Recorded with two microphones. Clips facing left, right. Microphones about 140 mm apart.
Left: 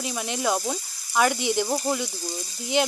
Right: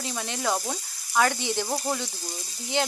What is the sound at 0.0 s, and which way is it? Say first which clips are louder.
Sizzle: left 3 dB; 15° left (ahead or behind).